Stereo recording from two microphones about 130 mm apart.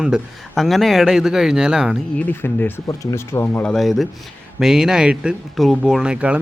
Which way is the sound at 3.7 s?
Centre (ahead or behind).